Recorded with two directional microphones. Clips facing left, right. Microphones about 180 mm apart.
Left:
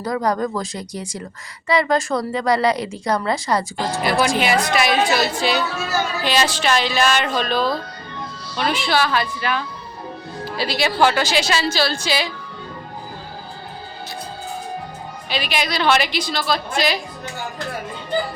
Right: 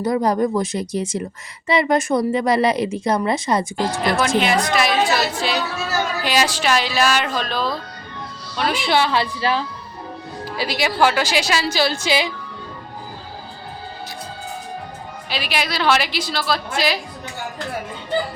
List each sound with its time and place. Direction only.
0.0 s speech: 25° right (ahead or behind)
4.4 s a woman's voice: centre (ahead or behind)
6.2 s a woman's voice: 10° right (ahead or behind)
8.7 s speech: 20° right (ahead or behind)
10.6 s a woman's voice: 15° right (ahead or behind)
15.3 s a woman's voice: 5° right (ahead or behind)